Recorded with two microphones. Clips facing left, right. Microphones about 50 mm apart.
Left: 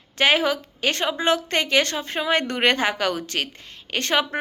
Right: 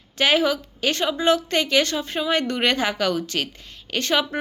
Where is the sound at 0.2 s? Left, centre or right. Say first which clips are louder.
Even; left.